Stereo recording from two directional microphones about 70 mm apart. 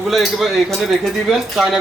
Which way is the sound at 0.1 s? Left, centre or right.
Centre.